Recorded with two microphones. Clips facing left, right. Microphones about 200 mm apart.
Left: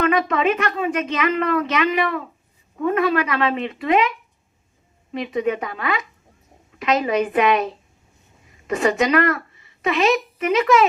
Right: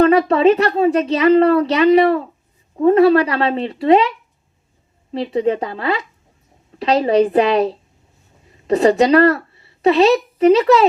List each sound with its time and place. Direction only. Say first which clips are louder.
0.0 s speech: right 7 dB; 35° right (ahead or behind)
5.1 s speech: right 4 dB; 30° right (ahead or behind)